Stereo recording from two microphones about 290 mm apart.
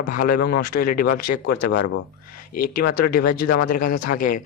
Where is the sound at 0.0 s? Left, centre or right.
Left.